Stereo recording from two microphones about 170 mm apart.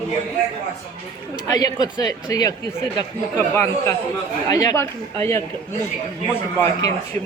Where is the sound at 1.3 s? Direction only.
20° left (ahead or behind).